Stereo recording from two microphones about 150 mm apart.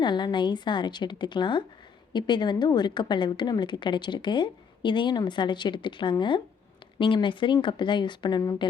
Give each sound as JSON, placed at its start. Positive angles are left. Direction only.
{"t": 0.0, "sound": "a woman's voice", "side_deg": 30}